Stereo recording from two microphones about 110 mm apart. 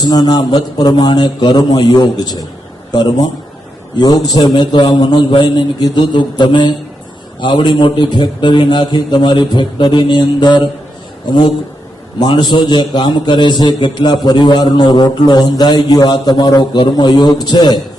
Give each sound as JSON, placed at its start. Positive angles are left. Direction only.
{"t": 0.1, "sound": "a man's voice", "side_deg": 40}